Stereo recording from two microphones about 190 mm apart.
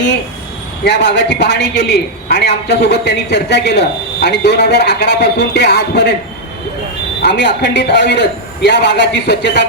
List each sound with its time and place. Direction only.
0.9 s a man's voice: 65° left (ahead or behind)
7.2 s a man's voice: 65° left (ahead or behind)